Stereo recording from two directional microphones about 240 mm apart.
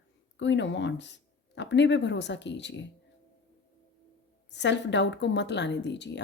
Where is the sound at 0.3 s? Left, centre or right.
Left.